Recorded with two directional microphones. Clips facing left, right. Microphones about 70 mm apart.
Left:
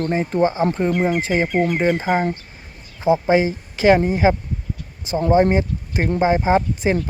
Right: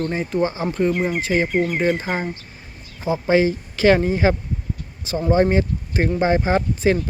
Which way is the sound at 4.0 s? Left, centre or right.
Centre.